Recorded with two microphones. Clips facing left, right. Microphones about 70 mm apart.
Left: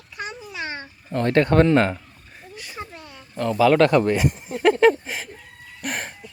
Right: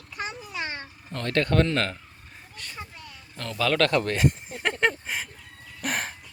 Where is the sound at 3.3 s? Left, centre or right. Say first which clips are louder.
Left 9 dB; centre.